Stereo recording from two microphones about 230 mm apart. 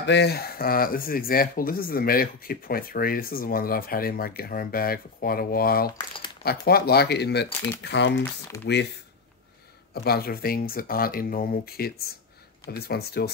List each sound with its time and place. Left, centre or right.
0.0 s speech: left
10.0 s speech: left